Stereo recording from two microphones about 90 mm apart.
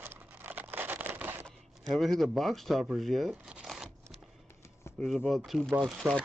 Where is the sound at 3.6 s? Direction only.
5° right (ahead or behind).